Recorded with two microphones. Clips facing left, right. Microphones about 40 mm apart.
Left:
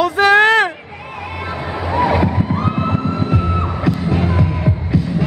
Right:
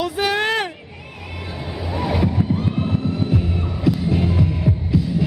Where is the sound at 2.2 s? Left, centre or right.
Left.